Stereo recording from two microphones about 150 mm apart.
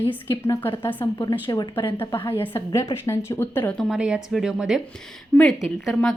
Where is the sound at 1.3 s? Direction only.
25° left (ahead or behind).